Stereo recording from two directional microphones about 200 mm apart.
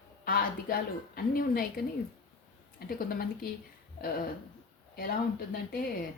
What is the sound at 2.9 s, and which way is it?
Speech, 45° left (ahead or behind).